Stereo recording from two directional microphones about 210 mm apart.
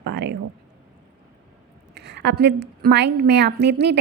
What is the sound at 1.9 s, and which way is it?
Speech, 55° right (ahead or behind).